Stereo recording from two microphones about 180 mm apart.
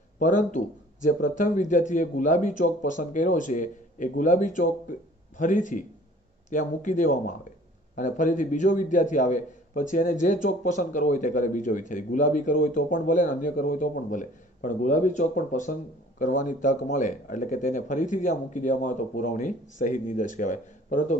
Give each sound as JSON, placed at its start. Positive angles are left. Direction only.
{"t": 0.2, "sound": "a man's voice", "side_deg": 45}